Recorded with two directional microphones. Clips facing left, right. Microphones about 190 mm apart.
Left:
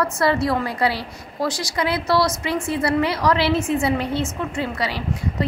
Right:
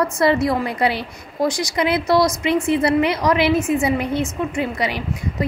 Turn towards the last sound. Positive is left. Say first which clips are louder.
# right 3 dB
turn(degrees=-15)  # may be behind; listen again after turning